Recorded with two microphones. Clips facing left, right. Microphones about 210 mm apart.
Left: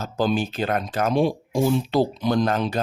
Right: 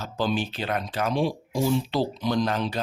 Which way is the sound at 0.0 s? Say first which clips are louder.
Left 4 dB; 45° left (ahead or behind).